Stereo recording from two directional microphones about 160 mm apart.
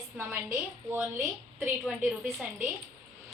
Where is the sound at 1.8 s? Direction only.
5° right (ahead or behind).